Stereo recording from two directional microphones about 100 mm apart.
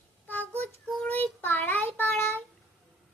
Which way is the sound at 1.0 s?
20° left (ahead or behind).